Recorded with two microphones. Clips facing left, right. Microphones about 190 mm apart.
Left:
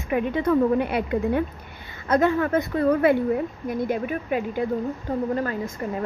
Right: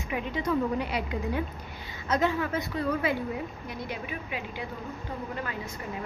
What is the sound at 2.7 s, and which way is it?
A woman's voice, 55° left (ahead or behind).